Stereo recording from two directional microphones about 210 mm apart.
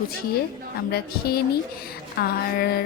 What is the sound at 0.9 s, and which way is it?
A woman's voice, 50° left (ahead or behind).